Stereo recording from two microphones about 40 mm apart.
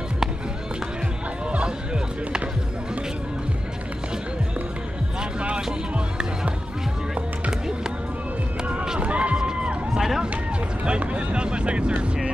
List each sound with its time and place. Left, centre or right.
5.4 s music: right
9.0 s run: right
9.9 s run: centre
10.9 s vehicle: right